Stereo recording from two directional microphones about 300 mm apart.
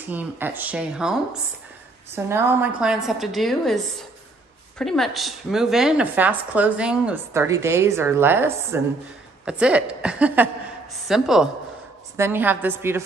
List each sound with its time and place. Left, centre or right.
0.1 s a woman's voice: centre